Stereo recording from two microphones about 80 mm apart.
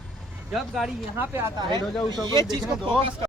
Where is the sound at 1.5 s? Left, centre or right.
Right.